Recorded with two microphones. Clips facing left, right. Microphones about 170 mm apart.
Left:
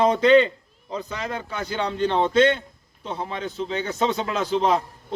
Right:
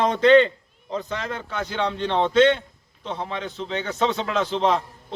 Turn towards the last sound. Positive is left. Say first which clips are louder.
# even
turn(degrees=5)  # may be behind; listen again after turning